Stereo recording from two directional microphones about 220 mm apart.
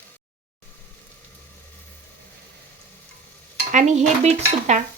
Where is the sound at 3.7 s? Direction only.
35° right (ahead or behind).